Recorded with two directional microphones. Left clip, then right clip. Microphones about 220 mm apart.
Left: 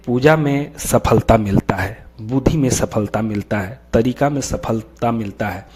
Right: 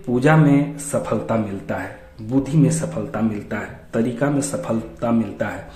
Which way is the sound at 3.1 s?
45° left (ahead or behind).